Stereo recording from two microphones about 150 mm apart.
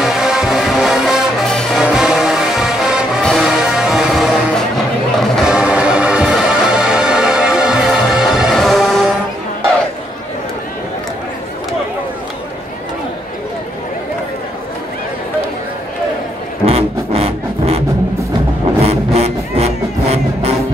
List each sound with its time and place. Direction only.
0.0 s music: 5° right (ahead or behind)
16.6 s a sound: 45° right (ahead or behind)
18.9 s music: 45° right (ahead or behind)